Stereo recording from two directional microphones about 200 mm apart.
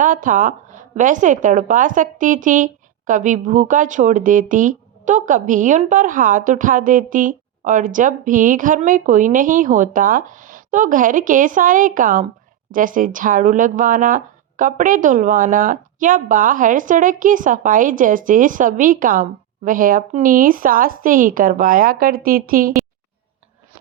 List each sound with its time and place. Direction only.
0.0 s a woman's voice: 40° right (ahead or behind)